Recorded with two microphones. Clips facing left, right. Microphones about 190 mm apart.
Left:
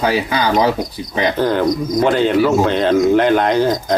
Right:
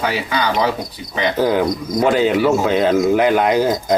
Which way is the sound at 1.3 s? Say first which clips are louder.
Right 1 dB; 10° right (ahead or behind).